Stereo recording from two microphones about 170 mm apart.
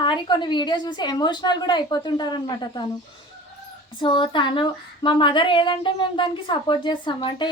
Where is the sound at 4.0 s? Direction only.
30° left (ahead or behind).